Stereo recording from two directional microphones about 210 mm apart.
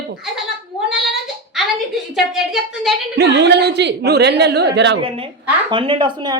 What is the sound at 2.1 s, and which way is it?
Speech, centre (ahead or behind).